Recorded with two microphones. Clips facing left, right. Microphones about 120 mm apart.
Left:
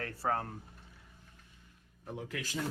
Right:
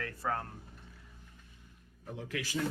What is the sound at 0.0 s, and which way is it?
Speech, 30° left (ahead or behind).